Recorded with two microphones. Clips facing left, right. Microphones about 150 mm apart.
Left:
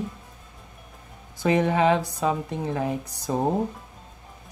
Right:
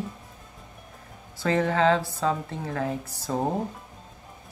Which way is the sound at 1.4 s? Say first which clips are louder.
Left 2 dB; 15° left (ahead or behind).